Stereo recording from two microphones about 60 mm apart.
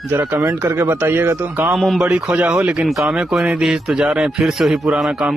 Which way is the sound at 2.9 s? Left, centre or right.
Centre.